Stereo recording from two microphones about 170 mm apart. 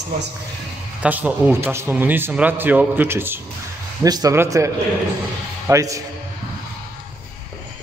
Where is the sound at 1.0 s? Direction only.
10° right (ahead or behind).